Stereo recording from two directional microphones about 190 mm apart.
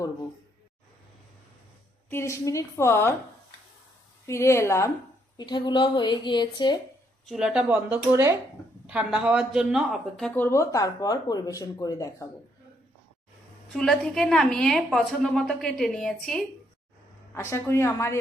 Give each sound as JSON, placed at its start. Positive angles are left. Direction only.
{"t": 2.0, "sound": "speech", "side_deg": 15}
{"t": 4.3, "sound": "a woman's voice", "side_deg": 15}
{"t": 7.3, "sound": "a woman's voice", "side_deg": -5}
{"t": 13.7, "sound": "a woman's voice", "side_deg": 0}
{"t": 17.3, "sound": "speech", "side_deg": 15}